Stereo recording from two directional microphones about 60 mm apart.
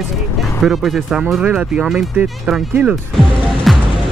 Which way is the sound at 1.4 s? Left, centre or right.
Centre.